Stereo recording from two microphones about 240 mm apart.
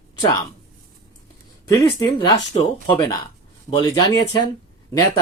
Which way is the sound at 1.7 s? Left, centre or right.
Centre.